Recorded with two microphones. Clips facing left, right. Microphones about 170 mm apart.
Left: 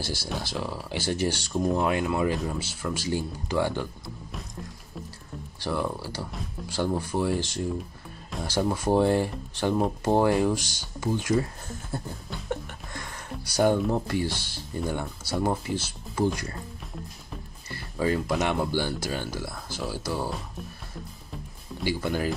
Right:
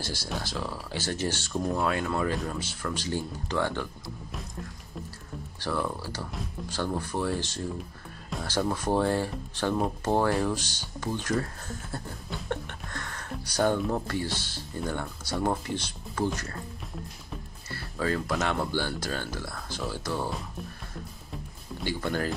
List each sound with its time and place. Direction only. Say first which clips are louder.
0.0 s speech: left 2 dB; 10° left (ahead or behind)
5.6 s speech: left 2 dB; 10° left (ahead or behind)
17.6 s music: left 3 dB; 15° left (ahead or behind)
18.4 s speech: left 2 dB; 10° left (ahead or behind)
21.8 s speech: left 2 dB; 10° left (ahead or behind)